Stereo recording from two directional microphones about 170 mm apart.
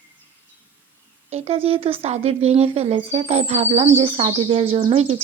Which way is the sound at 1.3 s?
35° right (ahead or behind).